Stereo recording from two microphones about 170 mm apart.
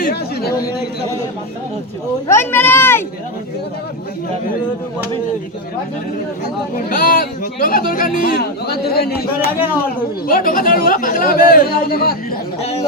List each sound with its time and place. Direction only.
0.0 s a sound: 65° left (ahead or behind)
2.2 s speech: 15° left (ahead or behind)
6.7 s speech: 55° left (ahead or behind)
10.2 s speech: 55° left (ahead or behind)